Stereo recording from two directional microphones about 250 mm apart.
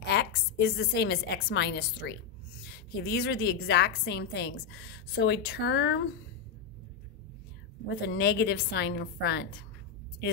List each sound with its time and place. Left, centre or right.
0.0 s a woman's voice: left
8.1 s a woman's voice: left